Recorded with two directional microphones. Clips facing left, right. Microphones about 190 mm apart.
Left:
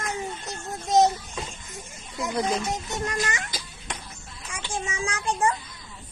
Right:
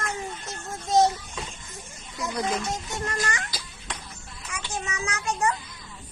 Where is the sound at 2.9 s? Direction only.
15° left (ahead or behind).